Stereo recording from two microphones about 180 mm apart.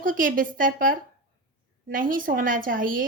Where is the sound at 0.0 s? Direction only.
50° right (ahead or behind).